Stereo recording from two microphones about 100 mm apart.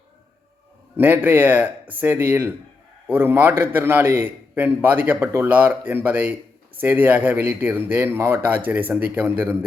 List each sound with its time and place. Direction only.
0.9 s a man's voice: 20° right (ahead or behind)